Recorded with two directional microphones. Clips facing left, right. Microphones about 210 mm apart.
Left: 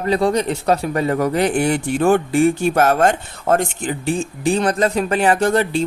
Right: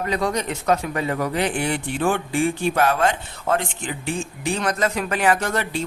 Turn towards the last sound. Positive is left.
turn(degrees=30)  # may be behind; listen again after turning